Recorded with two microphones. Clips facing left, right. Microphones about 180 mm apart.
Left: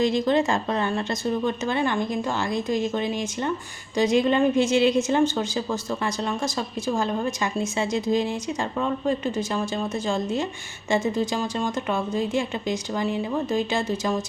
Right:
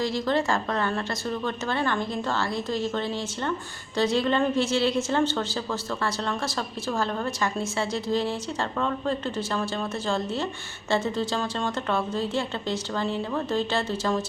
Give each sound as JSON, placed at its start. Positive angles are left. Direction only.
{"t": 0.0, "sound": "a woman's voice", "side_deg": 20}